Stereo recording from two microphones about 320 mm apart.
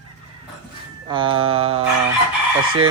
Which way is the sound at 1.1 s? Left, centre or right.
Centre.